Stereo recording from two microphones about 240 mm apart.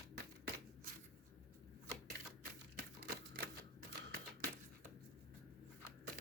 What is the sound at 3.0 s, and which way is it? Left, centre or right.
Typewriter, right.